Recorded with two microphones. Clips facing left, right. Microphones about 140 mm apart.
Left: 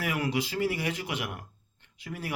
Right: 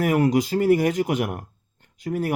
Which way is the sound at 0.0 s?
45° right (ahead or behind).